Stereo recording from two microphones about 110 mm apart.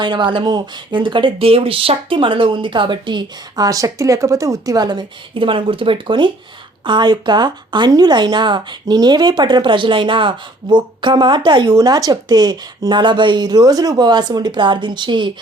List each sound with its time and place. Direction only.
0.0 s speech: 45° right (ahead or behind)